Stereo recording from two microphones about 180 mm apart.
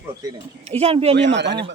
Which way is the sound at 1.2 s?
75° right (ahead or behind).